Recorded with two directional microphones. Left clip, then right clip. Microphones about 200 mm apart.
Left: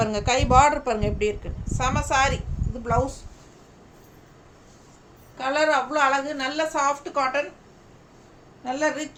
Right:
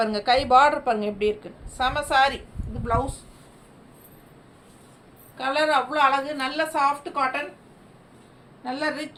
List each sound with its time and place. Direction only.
0.0 s a woman's voice: 20° left (ahead or behind)
5.4 s a woman's voice: 15° left (ahead or behind)
8.6 s a woman's voice: 10° left (ahead or behind)